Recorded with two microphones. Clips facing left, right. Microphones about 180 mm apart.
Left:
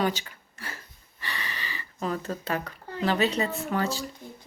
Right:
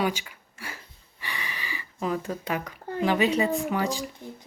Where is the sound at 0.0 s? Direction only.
10° right (ahead or behind).